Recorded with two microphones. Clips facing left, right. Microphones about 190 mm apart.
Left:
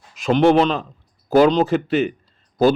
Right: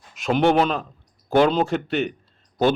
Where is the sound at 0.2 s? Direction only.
Centre (ahead or behind).